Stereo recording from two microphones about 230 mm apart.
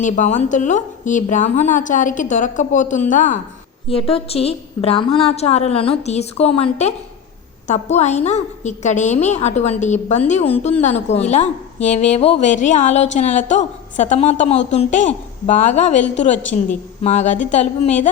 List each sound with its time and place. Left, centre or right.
0.0 s a woman's voice: left